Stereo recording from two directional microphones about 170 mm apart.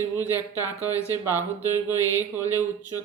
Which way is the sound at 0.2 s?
20° left (ahead or behind).